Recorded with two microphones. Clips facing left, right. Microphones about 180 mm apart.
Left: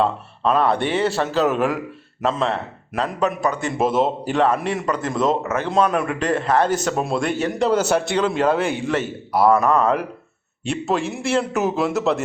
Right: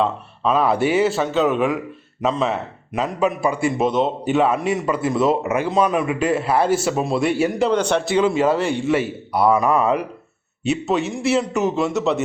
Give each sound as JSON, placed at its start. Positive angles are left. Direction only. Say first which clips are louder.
{"t": 0.0, "sound": "a man's voice", "louder": "even", "side_deg": -5}
{"t": 3.8, "sound": "a man's voice", "louder": "even", "side_deg": 5}
{"t": 5.4, "sound": "speech", "louder": "right 3 dB", "side_deg": -15}
{"t": 5.6, "sound": "a man's voice", "louder": "left 1 dB", "side_deg": -5}
{"t": 8.1, "sound": "a man's voice", "louder": "right 5 dB", "side_deg": -5}